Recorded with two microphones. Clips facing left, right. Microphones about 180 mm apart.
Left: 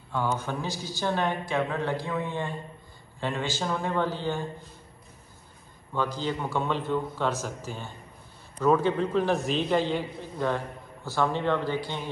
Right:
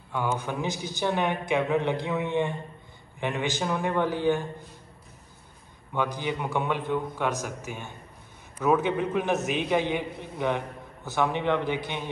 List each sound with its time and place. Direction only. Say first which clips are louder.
0.1 s a woman's voice: even; 15° right (ahead or behind)
5.9 s a woman's voice: even; 15° right (ahead or behind)